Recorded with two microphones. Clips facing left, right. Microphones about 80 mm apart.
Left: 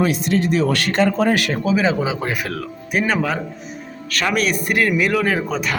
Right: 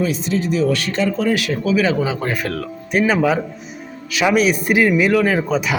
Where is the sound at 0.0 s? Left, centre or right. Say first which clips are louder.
Left 2 dB; left.